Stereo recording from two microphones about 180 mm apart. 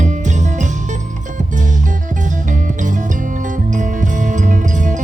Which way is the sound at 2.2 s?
45° right (ahead or behind).